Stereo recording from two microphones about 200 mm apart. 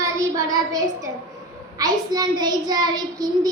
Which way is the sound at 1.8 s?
20° right (ahead or behind).